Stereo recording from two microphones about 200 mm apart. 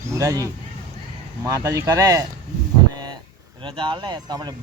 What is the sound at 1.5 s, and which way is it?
Speech, 15° right (ahead or behind).